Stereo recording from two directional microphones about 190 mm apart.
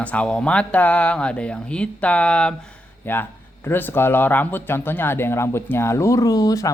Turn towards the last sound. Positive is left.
turn(degrees=20)  # may be behind; listen again after turning